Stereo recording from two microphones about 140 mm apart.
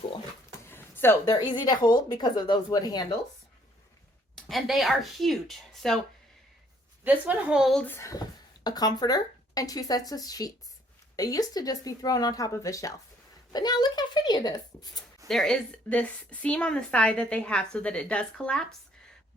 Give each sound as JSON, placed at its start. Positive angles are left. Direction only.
{"t": 0.6, "sound": "a sound", "side_deg": 15}
{"t": 1.2, "sound": "speech", "side_deg": 30}
{"t": 4.4, "sound": "speech", "side_deg": 0}
{"t": 7.0, "sound": "a woman's voice", "side_deg": -10}
{"t": 7.8, "sound": "a woman's voice", "side_deg": 15}
{"t": 15.3, "sound": "a woman's voice", "side_deg": 5}